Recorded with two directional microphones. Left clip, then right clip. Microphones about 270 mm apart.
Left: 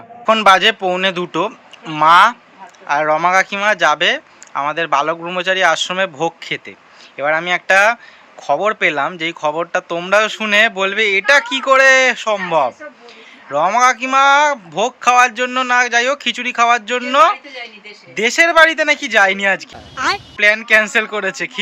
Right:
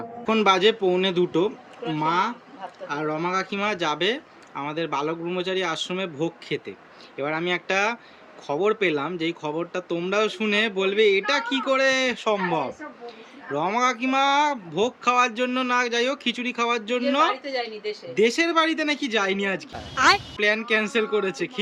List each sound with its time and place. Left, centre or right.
0.3 s speech: centre